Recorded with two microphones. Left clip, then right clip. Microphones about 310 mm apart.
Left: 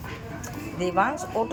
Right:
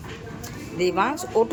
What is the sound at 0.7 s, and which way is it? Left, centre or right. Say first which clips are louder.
Speech: right 2 dB; centre.